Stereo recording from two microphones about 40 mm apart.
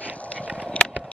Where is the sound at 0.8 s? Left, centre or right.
Left.